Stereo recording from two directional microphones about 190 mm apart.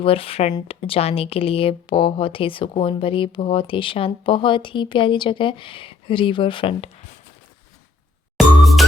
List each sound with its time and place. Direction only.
0.0 s speech: 30° left (ahead or behind)
8.4 s music: centre (ahead or behind)